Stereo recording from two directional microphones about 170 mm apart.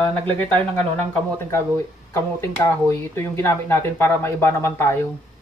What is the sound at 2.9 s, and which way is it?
Speech, 15° left (ahead or behind).